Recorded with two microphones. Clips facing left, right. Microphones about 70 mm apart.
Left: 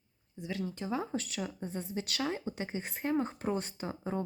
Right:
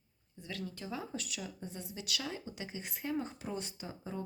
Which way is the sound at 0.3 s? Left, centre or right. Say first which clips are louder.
Left 6 dB; left.